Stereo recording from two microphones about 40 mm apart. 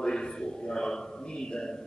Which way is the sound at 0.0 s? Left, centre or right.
Centre.